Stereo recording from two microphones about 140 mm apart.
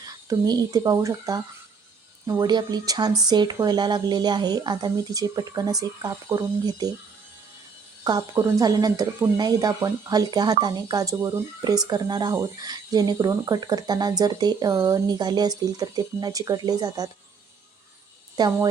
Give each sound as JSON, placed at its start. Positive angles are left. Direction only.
{"t": 0.0, "sound": "speech", "side_deg": -30}
{"t": 8.0, "sound": "speech", "side_deg": -25}
{"t": 18.3, "sound": "speech", "side_deg": -30}